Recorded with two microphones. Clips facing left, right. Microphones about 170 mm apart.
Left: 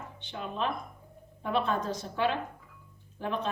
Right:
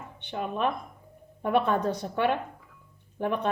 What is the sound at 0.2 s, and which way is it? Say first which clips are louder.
Speech: right 5 dB; 60° right (ahead or behind).